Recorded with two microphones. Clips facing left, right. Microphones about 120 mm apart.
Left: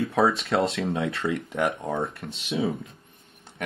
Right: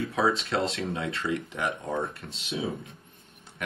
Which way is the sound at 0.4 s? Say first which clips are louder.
Left 4 dB; 60° left (ahead or behind).